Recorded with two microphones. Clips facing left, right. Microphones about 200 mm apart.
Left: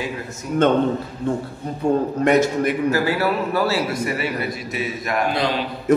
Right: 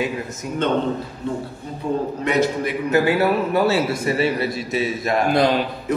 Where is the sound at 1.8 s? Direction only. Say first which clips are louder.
Left 4 dB; 50° left (ahead or behind).